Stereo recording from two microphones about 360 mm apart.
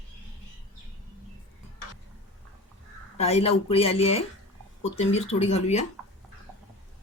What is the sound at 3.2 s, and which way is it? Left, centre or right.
Speech, centre.